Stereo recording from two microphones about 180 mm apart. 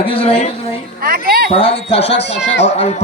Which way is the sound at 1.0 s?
55° right (ahead or behind).